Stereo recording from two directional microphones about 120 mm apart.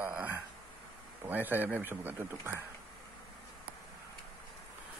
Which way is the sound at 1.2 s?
15° right (ahead or behind).